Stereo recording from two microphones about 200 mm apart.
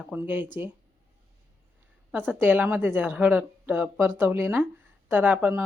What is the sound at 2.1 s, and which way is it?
A woman's voice, 10° right (ahead or behind).